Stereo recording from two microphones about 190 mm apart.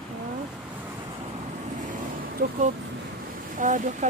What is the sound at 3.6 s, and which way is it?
Speech, 40° right (ahead or behind).